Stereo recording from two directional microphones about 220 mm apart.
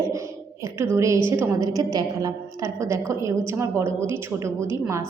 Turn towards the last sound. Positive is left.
turn(degrees=-10)  # may be behind; listen again after turning